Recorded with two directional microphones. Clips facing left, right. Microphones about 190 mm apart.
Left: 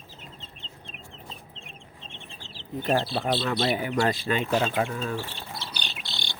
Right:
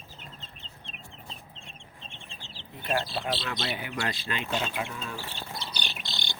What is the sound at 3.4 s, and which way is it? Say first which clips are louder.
Speech: left 8 dB; 40° left (ahead or behind).